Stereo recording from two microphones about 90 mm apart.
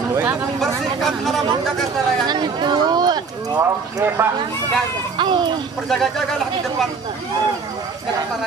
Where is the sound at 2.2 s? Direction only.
55° right (ahead or behind).